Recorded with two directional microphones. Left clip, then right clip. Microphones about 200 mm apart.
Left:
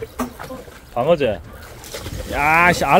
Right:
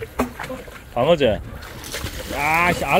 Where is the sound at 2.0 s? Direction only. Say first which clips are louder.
Left 4 dB; 15° left (ahead or behind).